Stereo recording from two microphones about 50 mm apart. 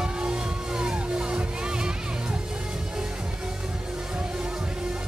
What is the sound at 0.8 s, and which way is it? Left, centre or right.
Music, centre.